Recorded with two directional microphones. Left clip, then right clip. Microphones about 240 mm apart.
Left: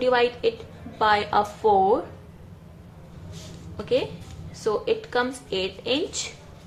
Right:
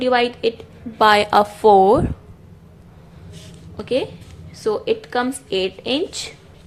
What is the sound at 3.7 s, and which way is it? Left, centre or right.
A woman's voice, right.